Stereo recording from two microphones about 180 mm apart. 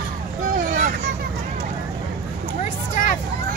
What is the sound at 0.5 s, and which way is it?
Vehicle, 45° right (ahead or behind).